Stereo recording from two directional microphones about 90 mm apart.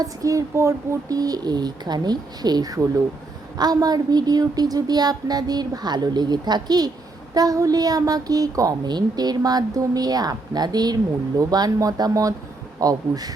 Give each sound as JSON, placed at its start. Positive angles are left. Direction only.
{"t": 0.0, "sound": "a woman's voice", "side_deg": -40}